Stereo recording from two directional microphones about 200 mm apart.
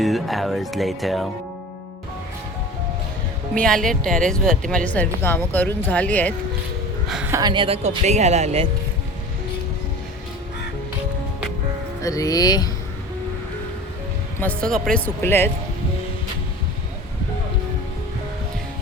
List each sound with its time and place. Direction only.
0.0 s speech: centre (ahead or behind)
3.5 s speech: 5° left (ahead or behind)
7.1 s speech: 5° right (ahead or behind)
7.3 s speech: 20° right (ahead or behind)
12.0 s speech: 15° left (ahead or behind)
14.3 s speech: 10° left (ahead or behind)